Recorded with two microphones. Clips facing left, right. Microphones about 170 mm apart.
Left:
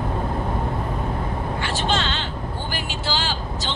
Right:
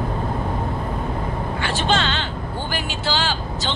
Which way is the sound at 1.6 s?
70° right (ahead or behind).